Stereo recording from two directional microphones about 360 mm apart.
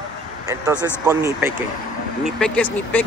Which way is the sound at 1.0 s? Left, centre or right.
Centre.